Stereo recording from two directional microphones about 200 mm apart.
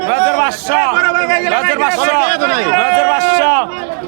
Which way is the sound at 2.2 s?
45° left (ahead or behind).